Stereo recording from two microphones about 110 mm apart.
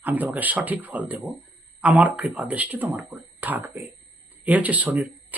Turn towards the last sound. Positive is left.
turn(degrees=-15)  # may be behind; listen again after turning